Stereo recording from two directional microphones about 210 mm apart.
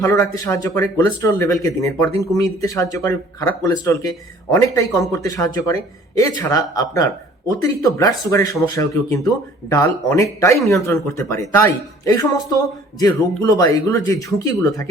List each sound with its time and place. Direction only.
0.0 s speech: 15° left (ahead or behind)